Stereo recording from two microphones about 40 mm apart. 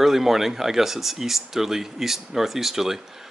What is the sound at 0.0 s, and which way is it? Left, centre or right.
Speech, centre.